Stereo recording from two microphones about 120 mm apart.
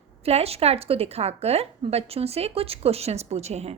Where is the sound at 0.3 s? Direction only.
60° right (ahead or behind).